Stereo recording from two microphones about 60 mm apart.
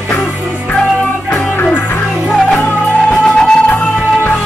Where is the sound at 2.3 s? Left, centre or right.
Centre.